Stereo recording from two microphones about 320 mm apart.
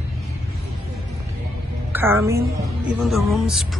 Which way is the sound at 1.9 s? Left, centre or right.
Centre.